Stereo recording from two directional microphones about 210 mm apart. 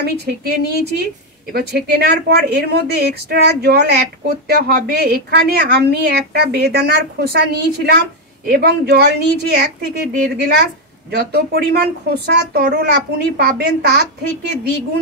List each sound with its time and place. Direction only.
0.0 s a woman's voice: 50° right (ahead or behind)